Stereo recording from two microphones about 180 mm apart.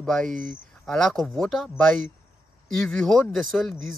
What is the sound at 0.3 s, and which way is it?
Speech, 45° right (ahead or behind).